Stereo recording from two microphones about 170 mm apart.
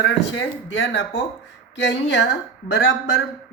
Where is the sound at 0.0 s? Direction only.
90° left.